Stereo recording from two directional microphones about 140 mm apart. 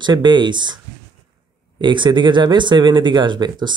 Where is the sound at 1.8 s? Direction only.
35° right (ahead or behind).